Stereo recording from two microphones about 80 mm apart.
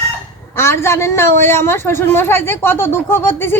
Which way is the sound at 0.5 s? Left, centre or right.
Left.